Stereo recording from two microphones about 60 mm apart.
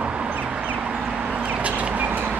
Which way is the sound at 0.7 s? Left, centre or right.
Centre.